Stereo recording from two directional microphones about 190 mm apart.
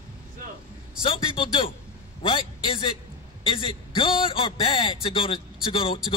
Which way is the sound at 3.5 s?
25° left (ahead or behind).